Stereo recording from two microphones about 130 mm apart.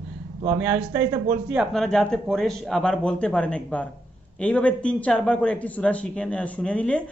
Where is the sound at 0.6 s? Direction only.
20° right (ahead or behind).